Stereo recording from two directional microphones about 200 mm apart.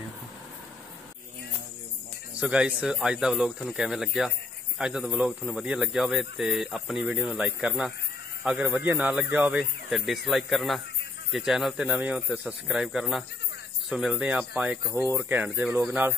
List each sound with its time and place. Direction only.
2.4 s speech: 5° right (ahead or behind)